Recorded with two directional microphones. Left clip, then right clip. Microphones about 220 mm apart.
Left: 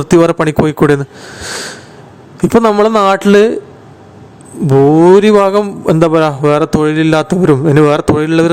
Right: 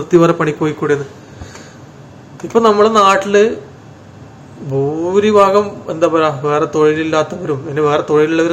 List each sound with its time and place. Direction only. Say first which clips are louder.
0.1 s speech: left 2 dB; 55° left (ahead or behind)
2.5 s a man's voice: left 1 dB; 50° left (ahead or behind)
4.7 s a man's voice: left 9 dB; 55° left (ahead or behind)